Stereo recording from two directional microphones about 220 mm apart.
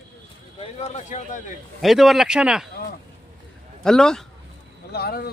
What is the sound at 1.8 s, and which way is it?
Speech, centre (ahead or behind).